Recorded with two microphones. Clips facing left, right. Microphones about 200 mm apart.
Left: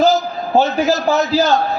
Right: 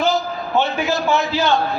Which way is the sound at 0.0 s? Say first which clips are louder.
Left 5 dB; 40° left (ahead or behind).